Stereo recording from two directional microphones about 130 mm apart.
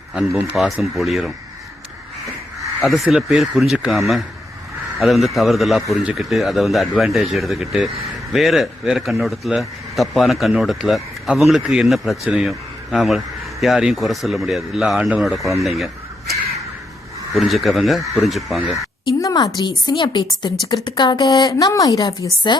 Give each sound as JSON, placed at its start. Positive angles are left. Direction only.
{"t": 0.5, "sound": "speech", "side_deg": 0}
{"t": 2.8, "sound": "speech", "side_deg": 0}
{"t": 19.2, "sound": "a sound", "side_deg": 30}
{"t": 19.5, "sound": "speech", "side_deg": 35}